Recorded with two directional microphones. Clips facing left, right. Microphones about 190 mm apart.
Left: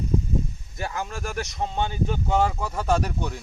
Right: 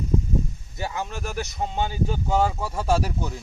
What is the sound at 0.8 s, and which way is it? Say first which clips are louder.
Speech: right 1 dB; 20° right (ahead or behind).